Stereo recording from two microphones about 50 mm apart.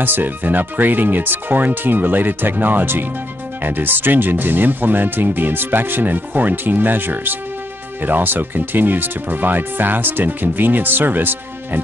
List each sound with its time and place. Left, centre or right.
0.0 s speech: right